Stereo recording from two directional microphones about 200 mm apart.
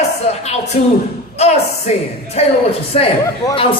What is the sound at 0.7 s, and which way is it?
Speech, 35° left (ahead or behind).